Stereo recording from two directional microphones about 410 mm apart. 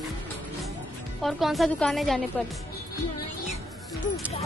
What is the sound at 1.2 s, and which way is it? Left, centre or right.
Speech, centre.